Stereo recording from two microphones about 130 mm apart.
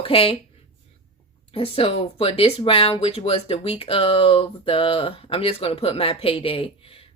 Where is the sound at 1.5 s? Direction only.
45° left (ahead or behind).